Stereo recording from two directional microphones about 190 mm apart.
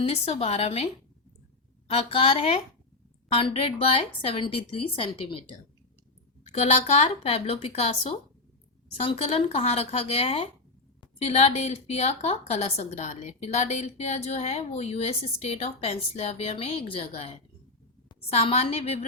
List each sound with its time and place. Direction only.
0.0 s a woman's voice: 30° left (ahead or behind)
1.9 s a woman's voice: 30° left (ahead or behind)
6.5 s a woman's voice: 35° left (ahead or behind)
9.0 s a woman's voice: 30° left (ahead or behind)